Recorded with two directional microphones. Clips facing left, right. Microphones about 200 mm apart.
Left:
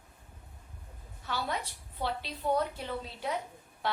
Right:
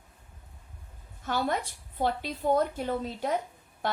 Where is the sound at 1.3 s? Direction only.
45° right (ahead or behind).